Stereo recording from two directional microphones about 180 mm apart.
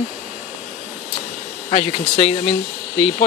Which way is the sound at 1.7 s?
35° left (ahead or behind).